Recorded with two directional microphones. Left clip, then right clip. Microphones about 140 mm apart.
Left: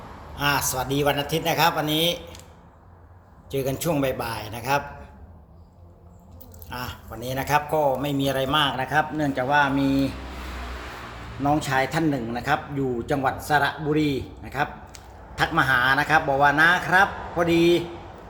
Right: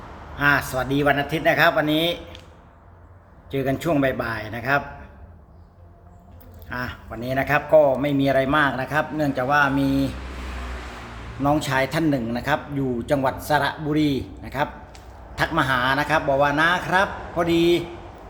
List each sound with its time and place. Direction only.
0.3 s a man's voice: 20° right (ahead or behind)
3.5 s speech: 20° right (ahead or behind)
6.7 s a man's voice: 15° right (ahead or behind)
11.4 s a man's voice: 20° right (ahead or behind)